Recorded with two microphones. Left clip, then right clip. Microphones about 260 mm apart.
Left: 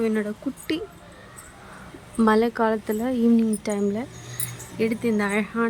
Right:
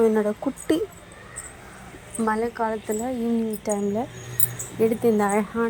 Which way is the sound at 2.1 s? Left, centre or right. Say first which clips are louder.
Left 4 dB; left.